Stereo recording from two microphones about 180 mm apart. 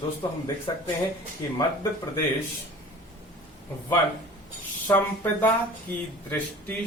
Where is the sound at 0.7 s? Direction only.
20° left (ahead or behind).